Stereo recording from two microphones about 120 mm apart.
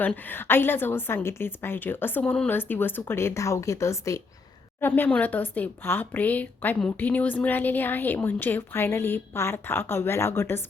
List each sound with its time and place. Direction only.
0.0 s speech: 15° left (ahead or behind)